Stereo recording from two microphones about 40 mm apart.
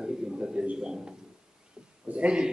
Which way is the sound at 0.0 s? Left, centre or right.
Right.